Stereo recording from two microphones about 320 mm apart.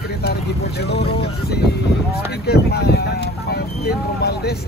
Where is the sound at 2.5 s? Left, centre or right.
Left.